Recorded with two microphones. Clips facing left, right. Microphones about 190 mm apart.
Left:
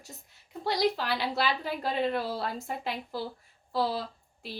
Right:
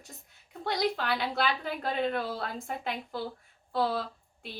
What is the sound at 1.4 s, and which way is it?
Speech, 50° right (ahead or behind).